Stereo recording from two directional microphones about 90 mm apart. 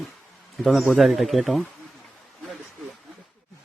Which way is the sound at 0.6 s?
Centre (ahead or behind).